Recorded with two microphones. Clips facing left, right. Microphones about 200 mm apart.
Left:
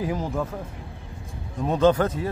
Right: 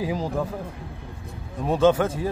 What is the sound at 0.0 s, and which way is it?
Speech, 15° right (ahead or behind).